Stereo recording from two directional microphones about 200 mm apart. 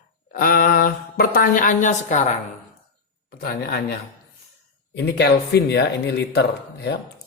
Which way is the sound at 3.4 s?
50° left (ahead or behind).